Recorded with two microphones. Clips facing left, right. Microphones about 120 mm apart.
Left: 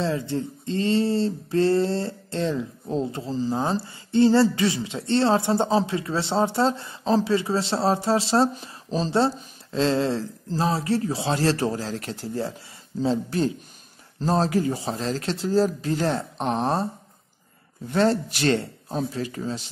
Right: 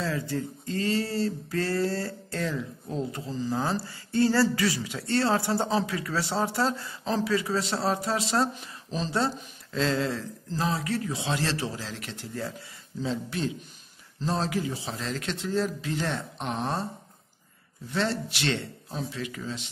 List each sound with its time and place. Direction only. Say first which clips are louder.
0.0 s speech: left 4 dB; 25° left (ahead or behind)
17.8 s speech: left 7 dB; 40° left (ahead or behind)